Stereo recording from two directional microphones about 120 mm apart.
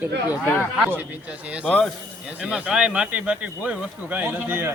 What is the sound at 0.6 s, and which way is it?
Speech, 15° right (ahead or behind).